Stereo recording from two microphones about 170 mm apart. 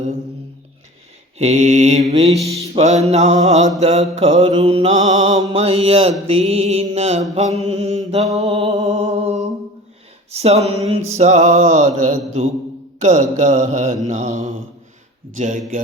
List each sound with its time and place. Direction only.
1.4 s mantra: 40° right (ahead or behind)
5.2 s mantra: 20° right (ahead or behind)
5.5 s mantra: 35° right (ahead or behind)